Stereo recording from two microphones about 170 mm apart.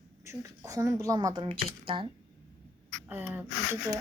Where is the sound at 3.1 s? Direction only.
10° right (ahead or behind).